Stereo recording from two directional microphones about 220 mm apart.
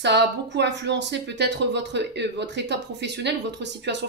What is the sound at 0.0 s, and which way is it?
Speech, 50° right (ahead or behind).